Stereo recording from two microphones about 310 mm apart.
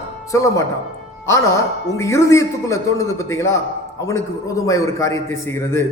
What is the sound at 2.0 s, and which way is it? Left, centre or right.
A man's voice, centre.